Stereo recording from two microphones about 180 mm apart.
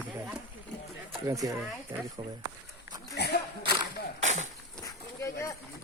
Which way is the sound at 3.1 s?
65° left (ahead or behind).